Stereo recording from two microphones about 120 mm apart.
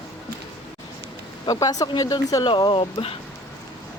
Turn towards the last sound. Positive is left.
turn(degrees=50)  # may be behind; listen again after turning